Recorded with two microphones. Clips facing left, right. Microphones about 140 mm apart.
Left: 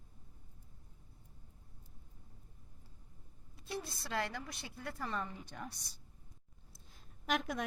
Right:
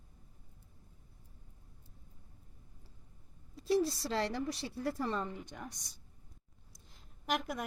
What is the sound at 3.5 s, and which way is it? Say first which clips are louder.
A woman's voice: right 13 dB; 40° right (ahead or behind).